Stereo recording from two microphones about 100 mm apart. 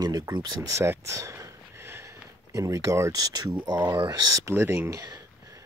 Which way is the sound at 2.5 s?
35° right (ahead or behind).